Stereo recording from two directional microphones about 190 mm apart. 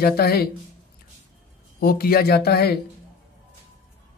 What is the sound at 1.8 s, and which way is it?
Speech, 55° left (ahead or behind).